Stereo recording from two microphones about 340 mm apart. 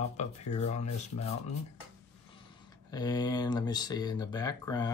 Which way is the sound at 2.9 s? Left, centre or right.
Centre.